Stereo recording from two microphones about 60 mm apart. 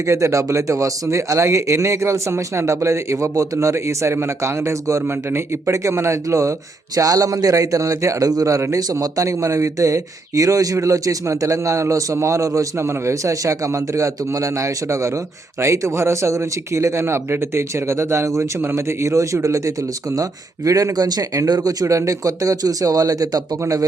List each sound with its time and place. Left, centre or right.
0.0 s a man's voice: right
5.0 s speech: right
5.7 s a man's voice: right
6.9 s a man's voice: right
20.7 s a man's voice: right